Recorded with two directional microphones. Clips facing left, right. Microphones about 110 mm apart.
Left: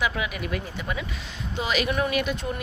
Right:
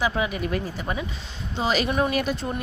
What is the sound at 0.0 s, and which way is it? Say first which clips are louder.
A woman's voice: right 3 dB; 35° right (ahead or behind).